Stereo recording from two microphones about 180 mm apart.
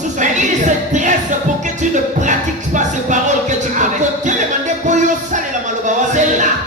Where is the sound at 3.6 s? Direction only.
45° right (ahead or behind).